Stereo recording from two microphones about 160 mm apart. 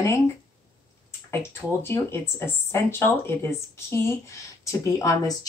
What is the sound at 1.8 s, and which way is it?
Speech, 15° left (ahead or behind).